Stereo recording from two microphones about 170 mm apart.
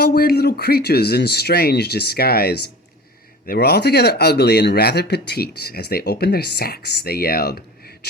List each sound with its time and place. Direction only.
0.0 s speech: 65° left (ahead or behind)